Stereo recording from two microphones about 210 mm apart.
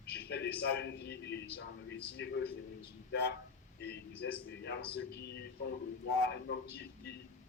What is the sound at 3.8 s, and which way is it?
Speech, 50° left (ahead or behind).